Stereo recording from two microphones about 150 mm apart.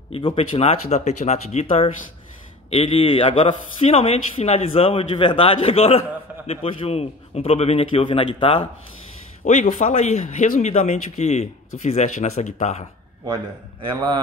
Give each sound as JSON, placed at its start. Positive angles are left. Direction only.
{"t": 0.1, "sound": "speech", "side_deg": 35}
{"t": 9.4, "sound": "speech", "side_deg": 55}
{"t": 13.3, "sound": "a man's voice", "side_deg": -30}